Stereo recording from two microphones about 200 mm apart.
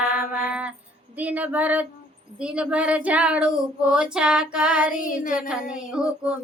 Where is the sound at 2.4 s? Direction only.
5° right (ahead or behind).